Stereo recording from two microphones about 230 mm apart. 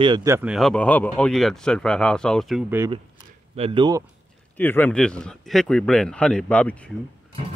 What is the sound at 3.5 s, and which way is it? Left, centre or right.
Speech, right.